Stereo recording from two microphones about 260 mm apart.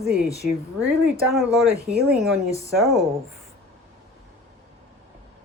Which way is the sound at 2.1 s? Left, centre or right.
Centre.